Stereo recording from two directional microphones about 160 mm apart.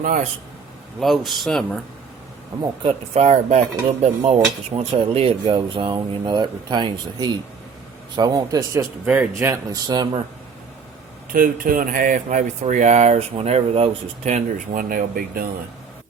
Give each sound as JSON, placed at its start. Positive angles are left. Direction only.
{"t": 0.0, "sound": "speech", "side_deg": -55}
{"t": 0.9, "sound": "speech", "side_deg": 0}
{"t": 2.6, "sound": "speech", "side_deg": -35}
{"t": 11.3, "sound": "speech", "side_deg": -60}